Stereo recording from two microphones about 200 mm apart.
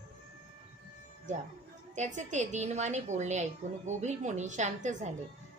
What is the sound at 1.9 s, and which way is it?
A woman's voice, 35° right (ahead or behind).